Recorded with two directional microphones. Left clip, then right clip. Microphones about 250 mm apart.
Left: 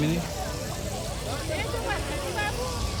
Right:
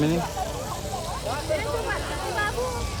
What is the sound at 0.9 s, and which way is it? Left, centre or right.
Vehicle, right.